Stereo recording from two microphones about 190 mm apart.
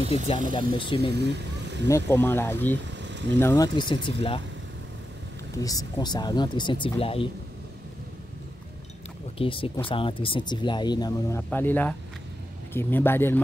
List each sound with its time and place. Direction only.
0.5 s speech: 25° left (ahead or behind)
1.1 s speech: 65° right (ahead or behind)
1.9 s speech: 15° left (ahead or behind)
3.0 s vehicle: 70° right (ahead or behind)
3.3 s speech: 15° left (ahead or behind)
5.6 s speech: 20° left (ahead or behind)
9.4 s speech: 30° left (ahead or behind); by 13.4 s 10° left (ahead or behind)